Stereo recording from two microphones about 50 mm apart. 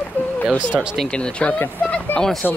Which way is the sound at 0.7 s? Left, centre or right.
Centre.